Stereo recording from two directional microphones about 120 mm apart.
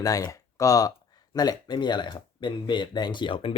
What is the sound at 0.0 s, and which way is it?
Speech, 30° left (ahead or behind).